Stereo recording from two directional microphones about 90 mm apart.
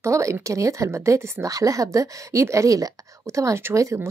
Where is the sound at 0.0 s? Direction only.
35° right (ahead or behind).